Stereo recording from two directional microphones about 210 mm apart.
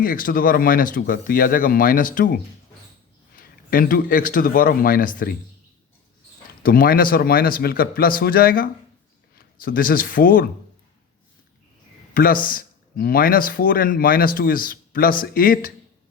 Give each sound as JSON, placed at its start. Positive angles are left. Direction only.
{"t": 0.0, "sound": "speech", "side_deg": 40}
{"t": 6.6, "sound": "speech", "side_deg": 45}
{"t": 12.1, "sound": "speech", "side_deg": 40}